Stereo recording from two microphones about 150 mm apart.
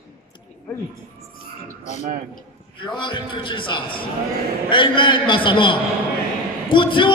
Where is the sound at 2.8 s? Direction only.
30° left (ahead or behind).